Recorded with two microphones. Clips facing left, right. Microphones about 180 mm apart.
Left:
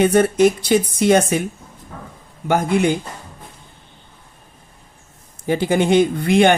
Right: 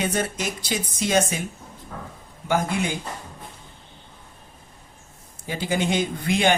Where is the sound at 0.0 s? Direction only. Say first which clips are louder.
Left 12 dB; 60° left (ahead or behind).